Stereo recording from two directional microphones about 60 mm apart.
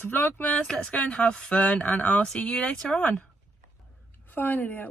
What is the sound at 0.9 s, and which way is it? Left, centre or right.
Speech, centre.